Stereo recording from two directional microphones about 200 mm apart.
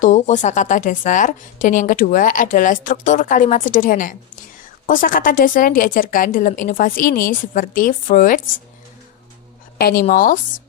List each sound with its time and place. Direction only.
0.0 s a woman's voice: 35° left (ahead or behind)
9.7 s speech: 50° left (ahead or behind)